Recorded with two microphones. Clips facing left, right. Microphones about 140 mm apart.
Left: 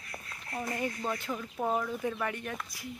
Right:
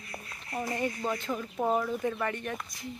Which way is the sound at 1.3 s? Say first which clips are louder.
Right 3 dB; 10° right (ahead or behind).